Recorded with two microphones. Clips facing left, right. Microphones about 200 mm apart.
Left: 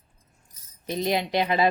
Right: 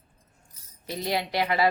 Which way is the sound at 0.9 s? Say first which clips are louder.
Left 4 dB; 20° left (ahead or behind).